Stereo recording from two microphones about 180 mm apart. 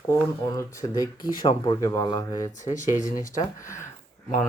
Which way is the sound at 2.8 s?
45° left (ahead or behind).